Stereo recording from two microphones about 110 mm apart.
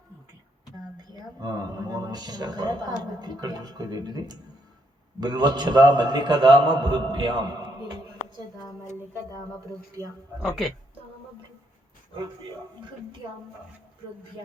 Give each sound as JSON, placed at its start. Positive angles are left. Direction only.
{"t": 0.9, "sound": "a man's voice", "side_deg": -35}
{"t": 7.4, "sound": "a sound", "side_deg": -40}
{"t": 10.4, "sound": "speech", "side_deg": 0}